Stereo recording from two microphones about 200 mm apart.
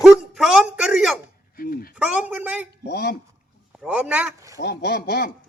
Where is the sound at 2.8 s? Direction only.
55° left (ahead or behind).